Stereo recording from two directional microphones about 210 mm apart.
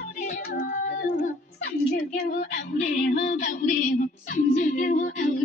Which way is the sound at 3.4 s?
35° left (ahead or behind).